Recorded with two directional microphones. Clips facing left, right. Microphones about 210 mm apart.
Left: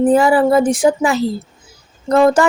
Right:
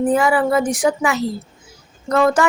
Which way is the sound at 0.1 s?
30° left (ahead or behind).